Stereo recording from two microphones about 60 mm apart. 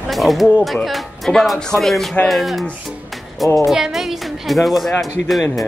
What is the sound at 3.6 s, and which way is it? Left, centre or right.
Speech, centre.